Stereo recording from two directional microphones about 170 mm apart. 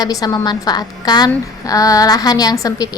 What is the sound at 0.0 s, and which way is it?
A woman's voice, 20° left (ahead or behind).